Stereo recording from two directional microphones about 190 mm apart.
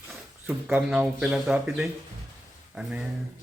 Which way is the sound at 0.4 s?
5° right (ahead or behind).